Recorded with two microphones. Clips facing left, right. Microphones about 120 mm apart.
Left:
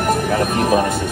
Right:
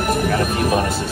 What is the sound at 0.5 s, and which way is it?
Speech, 30° left (ahead or behind).